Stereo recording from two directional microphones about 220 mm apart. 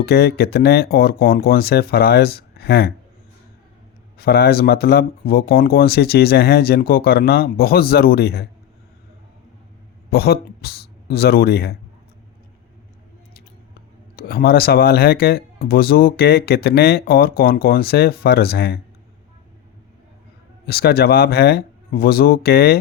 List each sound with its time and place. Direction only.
0.0 s speech: 45° left (ahead or behind)
4.2 s speech: 45° left (ahead or behind)
10.1 s speech: 45° left (ahead or behind)
14.2 s speech: 45° left (ahead or behind)
20.7 s speech: 45° left (ahead or behind)